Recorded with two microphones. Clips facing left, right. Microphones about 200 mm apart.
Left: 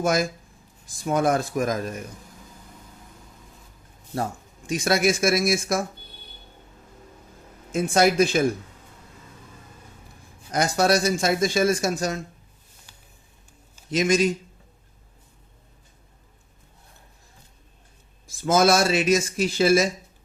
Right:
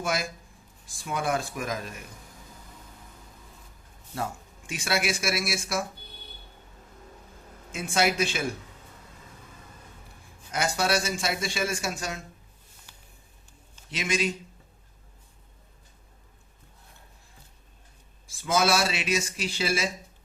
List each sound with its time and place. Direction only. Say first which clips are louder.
0.0 s speech: left 7 dB; 45° left (ahead or behind)
4.1 s speech: left 5 dB; 40° left (ahead or behind)
7.7 s speech: left 6 dB; 45° left (ahead or behind)
10.5 s a man's voice: left 6 dB; 40° left (ahead or behind)
13.9 s speech: left 9 dB; 45° left (ahead or behind)
18.3 s speech: left 6 dB; 45° left (ahead or behind)